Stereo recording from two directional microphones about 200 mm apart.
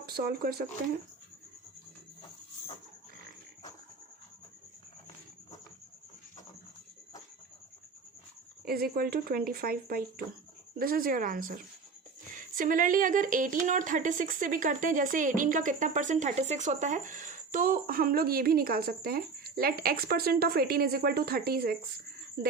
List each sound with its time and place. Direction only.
0.0 s speech: 50° right (ahead or behind)
8.6 s speech: 50° right (ahead or behind)